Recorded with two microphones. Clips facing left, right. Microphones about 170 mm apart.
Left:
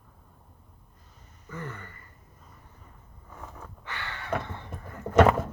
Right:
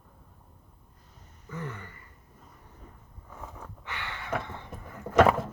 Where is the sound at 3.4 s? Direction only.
5° right (ahead or behind).